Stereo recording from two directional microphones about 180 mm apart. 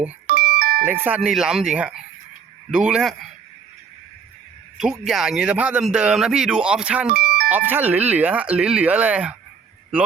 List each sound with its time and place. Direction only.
0.3 s doorbell: 55° right (ahead or behind)
0.9 s a man's voice: 10° right (ahead or behind)
4.8 s a man's voice: centre (ahead or behind)
7.1 s music: 55° right (ahead or behind)
7.4 s speech: 10° right (ahead or behind)